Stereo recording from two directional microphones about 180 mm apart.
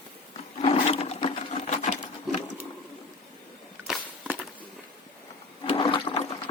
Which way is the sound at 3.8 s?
Centre (ahead or behind).